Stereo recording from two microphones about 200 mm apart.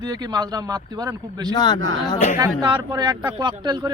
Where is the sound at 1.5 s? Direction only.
20° left (ahead or behind).